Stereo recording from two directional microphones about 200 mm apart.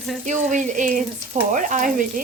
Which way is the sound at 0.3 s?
40° right (ahead or behind).